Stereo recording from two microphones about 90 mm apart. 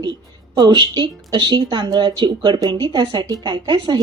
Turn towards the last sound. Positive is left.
turn(degrees=-50)  # may be behind; listen again after turning